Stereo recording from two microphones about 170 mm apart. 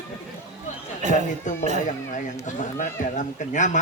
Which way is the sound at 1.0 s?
45° right (ahead or behind).